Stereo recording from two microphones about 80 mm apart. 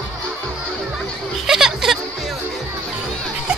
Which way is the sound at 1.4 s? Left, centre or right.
Centre.